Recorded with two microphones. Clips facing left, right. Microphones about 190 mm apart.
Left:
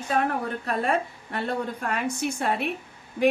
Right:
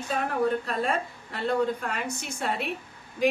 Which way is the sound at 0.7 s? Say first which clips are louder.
Left 3 dB; 60° left (ahead or behind).